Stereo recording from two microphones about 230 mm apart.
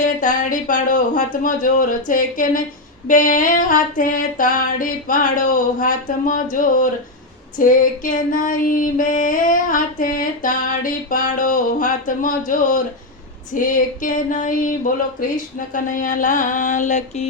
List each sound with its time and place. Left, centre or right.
0.0 s female singing: left
15.7 s female singing: left